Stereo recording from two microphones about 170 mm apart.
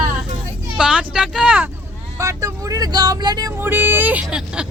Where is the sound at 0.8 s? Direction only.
5° right (ahead or behind).